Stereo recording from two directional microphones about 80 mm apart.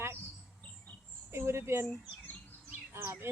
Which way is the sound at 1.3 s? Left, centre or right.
Right.